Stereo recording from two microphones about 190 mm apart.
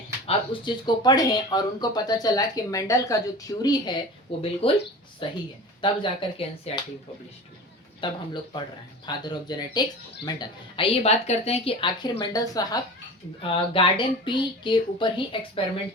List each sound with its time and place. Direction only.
0.3 s speech: 25° left (ahead or behind)
8.0 s speech: 25° left (ahead or behind)